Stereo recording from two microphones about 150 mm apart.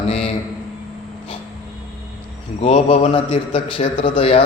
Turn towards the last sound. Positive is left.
turn(degrees=35)  # may be behind; listen again after turning